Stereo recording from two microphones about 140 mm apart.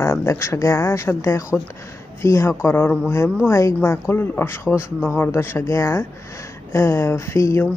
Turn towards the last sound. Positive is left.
turn(degrees=20)  # may be behind; listen again after turning